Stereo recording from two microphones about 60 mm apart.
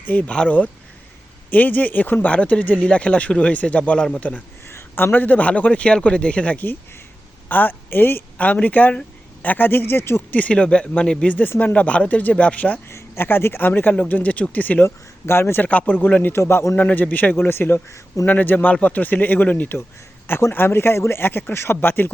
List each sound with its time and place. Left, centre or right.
0.0 s speech: left
4.7 s a sound: left
5.1 s a woman's voice: left
8.4 s speech: left
10.3 s speech: left
12.9 s speech: left
14.8 s speech: left
15.6 s speech: left
16.4 s speech: left
16.7 s speech: left
17.3 s speech: left